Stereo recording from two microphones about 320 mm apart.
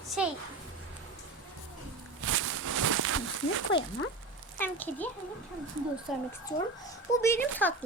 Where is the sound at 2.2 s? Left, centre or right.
Right.